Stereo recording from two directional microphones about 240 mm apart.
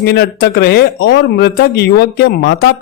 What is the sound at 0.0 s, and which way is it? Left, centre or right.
A man's voice, left.